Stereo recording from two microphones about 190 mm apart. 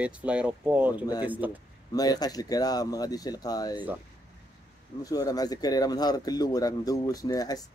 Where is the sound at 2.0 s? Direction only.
20° left (ahead or behind).